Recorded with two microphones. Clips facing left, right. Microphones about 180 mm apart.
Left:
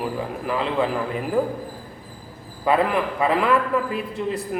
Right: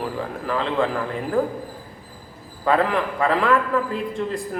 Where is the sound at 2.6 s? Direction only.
10° left (ahead or behind).